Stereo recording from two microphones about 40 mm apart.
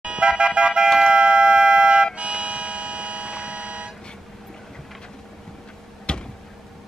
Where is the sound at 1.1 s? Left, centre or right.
Right.